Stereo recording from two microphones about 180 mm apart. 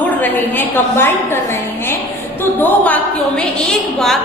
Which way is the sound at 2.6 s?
10° left (ahead or behind).